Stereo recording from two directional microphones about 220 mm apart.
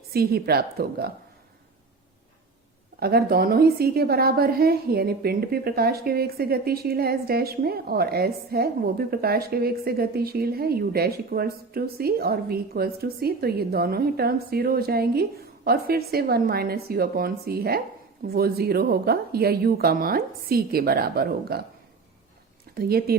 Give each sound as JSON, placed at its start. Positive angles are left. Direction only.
{"t": 0.1, "sound": "a woman's voice", "side_deg": -45}
{"t": 3.0, "sound": "a woman's voice", "side_deg": -45}
{"t": 22.7, "sound": "speech", "side_deg": -45}